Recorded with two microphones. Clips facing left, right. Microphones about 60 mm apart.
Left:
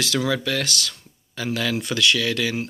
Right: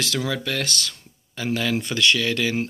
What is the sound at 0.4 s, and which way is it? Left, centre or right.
A man's voice, right.